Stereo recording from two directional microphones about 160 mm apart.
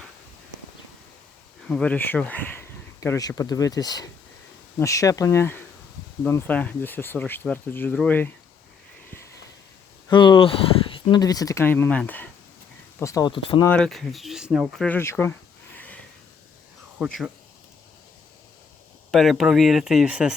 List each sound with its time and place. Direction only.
1.6 s speech: 5° left (ahead or behind)
10.1 s speech: 30° left (ahead or behind)
13.3 s speech: 30° left (ahead or behind)
13.7 s speech: 5° left (ahead or behind)
14.8 s a sound: 15° left (ahead or behind)
17.0 s speech: 5° right (ahead or behind)
19.1 s speech: centre (ahead or behind)